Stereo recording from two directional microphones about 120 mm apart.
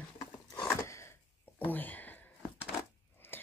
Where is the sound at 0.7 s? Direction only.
25° left (ahead or behind).